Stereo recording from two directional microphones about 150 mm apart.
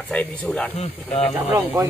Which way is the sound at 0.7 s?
45° left (ahead or behind).